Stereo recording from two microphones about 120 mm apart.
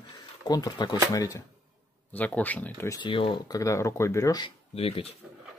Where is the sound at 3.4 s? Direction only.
25° left (ahead or behind).